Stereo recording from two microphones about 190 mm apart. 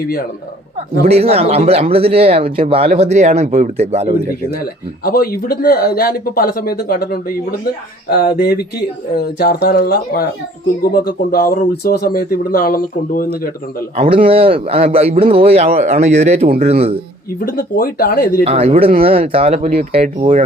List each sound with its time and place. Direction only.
1.0 s speech: 30° right (ahead or behind)
4.6 s speech: 50° left (ahead or behind)
13.9 s speech: 30° right (ahead or behind)
17.4 s speech: 50° left (ahead or behind)
18.4 s speech: 30° right (ahead or behind)